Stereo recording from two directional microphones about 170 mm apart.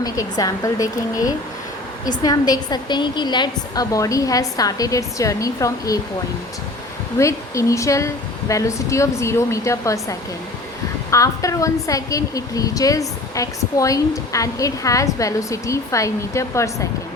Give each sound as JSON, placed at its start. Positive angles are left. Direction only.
{"t": 0.0, "sound": "a woman's voice", "side_deg": 20}
{"t": 7.2, "sound": "a woman's voice", "side_deg": 15}